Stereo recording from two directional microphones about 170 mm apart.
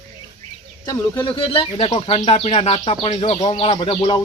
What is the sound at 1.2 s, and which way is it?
Speech, 30° left (ahead or behind).